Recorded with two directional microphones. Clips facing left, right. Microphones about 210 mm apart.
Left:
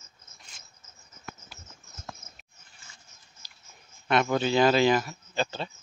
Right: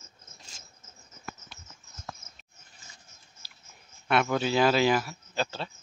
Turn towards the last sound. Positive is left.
turn(degrees=-5)  # may be behind; listen again after turning